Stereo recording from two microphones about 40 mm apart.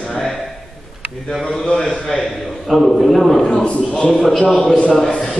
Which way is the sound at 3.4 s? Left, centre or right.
Centre.